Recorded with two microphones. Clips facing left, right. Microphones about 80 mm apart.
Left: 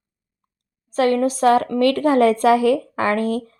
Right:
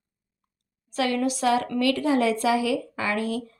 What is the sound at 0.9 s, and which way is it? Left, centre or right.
A woman's voice, left.